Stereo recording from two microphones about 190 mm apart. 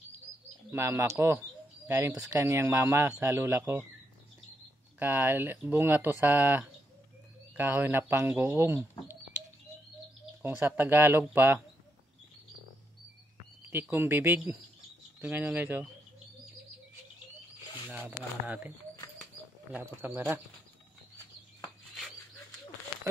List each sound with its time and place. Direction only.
0.3 s bird: 5° left (ahead or behind)
0.7 s speech: 15° right (ahead or behind)
4.9 s speech: 10° right (ahead or behind)
9.0 s bird: 10° right (ahead or behind)
10.4 s speech: 10° right (ahead or behind)
13.7 s speech: 10° right (ahead or behind)
17.8 s speech: 10° right (ahead or behind)
19.7 s speech: 15° right (ahead or behind)